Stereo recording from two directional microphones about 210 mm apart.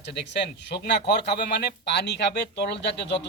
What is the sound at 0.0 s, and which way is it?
A man's voice, 55° left (ahead or behind).